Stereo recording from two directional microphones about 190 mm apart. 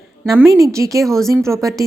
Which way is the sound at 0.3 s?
15° right (ahead or behind).